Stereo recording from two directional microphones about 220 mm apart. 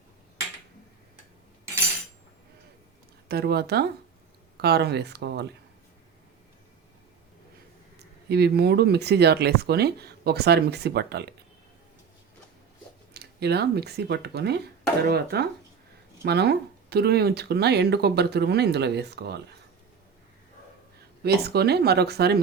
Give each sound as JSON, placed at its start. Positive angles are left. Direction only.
{"t": 3.2, "sound": "speech", "side_deg": -45}
{"t": 8.3, "sound": "speech", "side_deg": -45}
{"t": 13.1, "sound": "speech", "side_deg": -45}
{"t": 21.2, "sound": "speech", "side_deg": -45}